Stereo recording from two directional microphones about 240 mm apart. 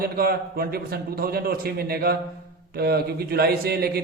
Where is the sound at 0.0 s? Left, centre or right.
Right.